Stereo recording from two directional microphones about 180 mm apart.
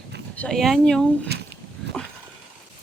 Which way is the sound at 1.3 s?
65° right (ahead or behind).